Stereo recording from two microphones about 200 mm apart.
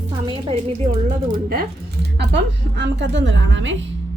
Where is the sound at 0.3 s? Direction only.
30° right (ahead or behind).